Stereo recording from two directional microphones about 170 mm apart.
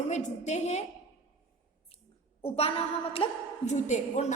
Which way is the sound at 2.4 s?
35° left (ahead or behind).